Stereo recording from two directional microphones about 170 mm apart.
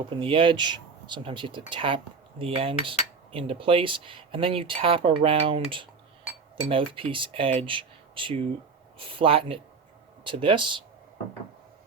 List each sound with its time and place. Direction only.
0.2 s speech: 30° right (ahead or behind)